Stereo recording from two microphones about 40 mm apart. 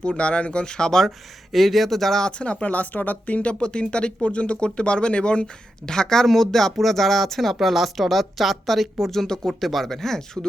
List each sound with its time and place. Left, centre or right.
0.0 s speech: left
1.5 s speech: centre
2.2 s speech: left
9.6 s speech: centre